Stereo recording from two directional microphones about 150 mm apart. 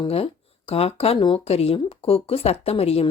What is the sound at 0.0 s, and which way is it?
Speech, 40° left (ahead or behind).